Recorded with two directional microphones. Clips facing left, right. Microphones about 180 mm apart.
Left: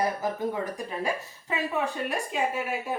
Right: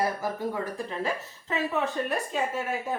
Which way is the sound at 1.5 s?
10° left (ahead or behind).